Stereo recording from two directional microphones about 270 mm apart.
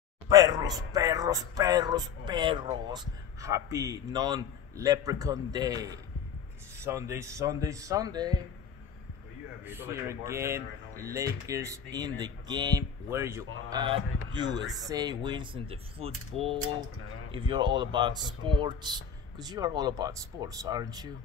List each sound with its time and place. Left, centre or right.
0.3 s speech: centre
9.7 s speech: centre